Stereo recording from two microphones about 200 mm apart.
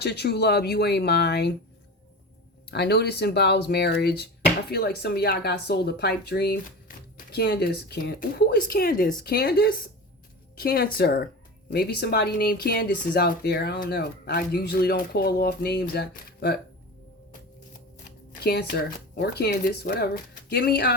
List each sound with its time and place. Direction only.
0.0 s speech: 55° left (ahead or behind)
2.6 s speech: 55° left (ahead or behind)
18.3 s speech: 50° left (ahead or behind)